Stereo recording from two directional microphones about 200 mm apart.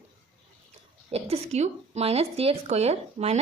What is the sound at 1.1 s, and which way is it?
Speech, 30° right (ahead or behind).